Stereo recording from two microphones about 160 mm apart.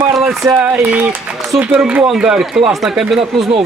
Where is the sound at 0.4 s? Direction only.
10° right (ahead or behind).